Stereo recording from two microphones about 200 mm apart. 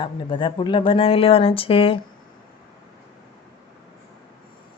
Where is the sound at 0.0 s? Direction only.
25° left (ahead or behind).